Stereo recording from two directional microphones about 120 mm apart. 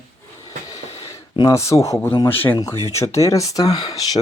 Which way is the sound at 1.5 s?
25° left (ahead or behind).